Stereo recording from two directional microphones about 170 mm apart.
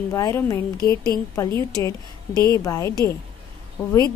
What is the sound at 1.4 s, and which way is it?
Speech, 20° left (ahead or behind).